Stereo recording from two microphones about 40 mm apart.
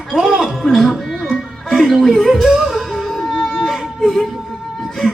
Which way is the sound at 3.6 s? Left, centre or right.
Centre.